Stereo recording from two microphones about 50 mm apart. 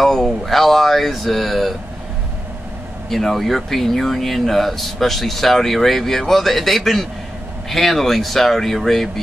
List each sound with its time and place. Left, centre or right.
0.0 s speech: centre
3.1 s speech: centre